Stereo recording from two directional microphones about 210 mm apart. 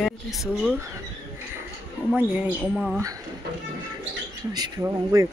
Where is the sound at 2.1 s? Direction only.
5° right (ahead or behind).